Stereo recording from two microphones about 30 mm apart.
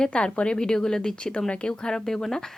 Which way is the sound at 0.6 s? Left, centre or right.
Left.